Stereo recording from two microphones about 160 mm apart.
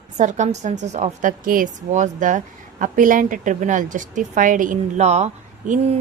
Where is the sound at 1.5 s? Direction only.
55° right (ahead or behind).